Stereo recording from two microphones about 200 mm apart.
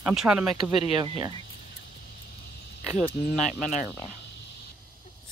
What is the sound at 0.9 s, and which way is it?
Speech, 25° right (ahead or behind).